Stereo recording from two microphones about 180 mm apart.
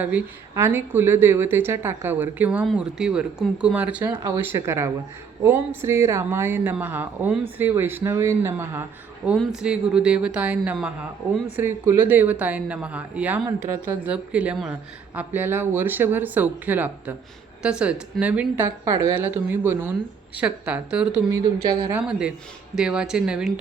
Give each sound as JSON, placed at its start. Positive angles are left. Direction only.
{"t": 0.0, "sound": "speech", "side_deg": -10}
{"t": 21.3, "sound": "speech", "side_deg": -20}
{"t": 21.9, "sound": "speech", "side_deg": -5}